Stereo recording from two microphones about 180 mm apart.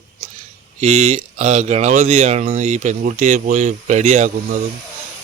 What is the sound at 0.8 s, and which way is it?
Speech, 40° right (ahead or behind).